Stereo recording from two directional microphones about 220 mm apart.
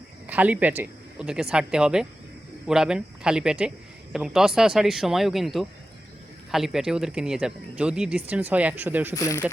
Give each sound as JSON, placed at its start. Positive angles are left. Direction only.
{"t": 0.3, "sound": "speech", "side_deg": -5}
{"t": 9.1, "sound": "speech", "side_deg": 15}